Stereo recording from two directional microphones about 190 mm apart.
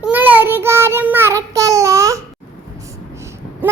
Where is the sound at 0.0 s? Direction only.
10° right (ahead or behind).